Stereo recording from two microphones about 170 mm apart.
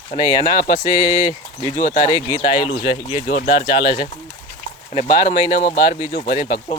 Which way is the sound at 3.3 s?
60° left (ahead or behind).